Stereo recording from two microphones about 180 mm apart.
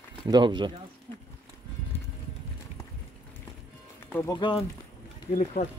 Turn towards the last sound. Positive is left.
turn(degrees=40)  # may be behind; listen again after turning